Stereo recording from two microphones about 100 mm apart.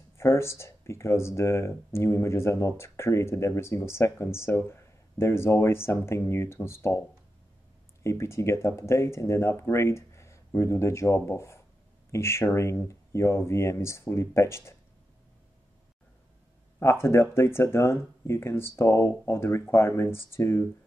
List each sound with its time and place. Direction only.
0.2 s speech: 25° left (ahead or behind)
8.0 s speech: 30° left (ahead or behind)
16.8 s speech: 25° left (ahead or behind)